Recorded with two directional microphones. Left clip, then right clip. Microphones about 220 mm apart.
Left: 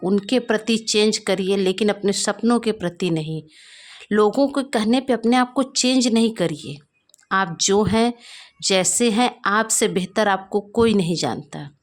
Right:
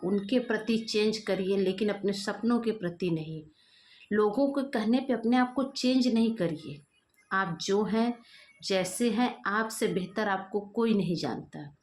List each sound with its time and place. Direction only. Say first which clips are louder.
0.0 s speech: left 9 dB; 50° left (ahead or behind)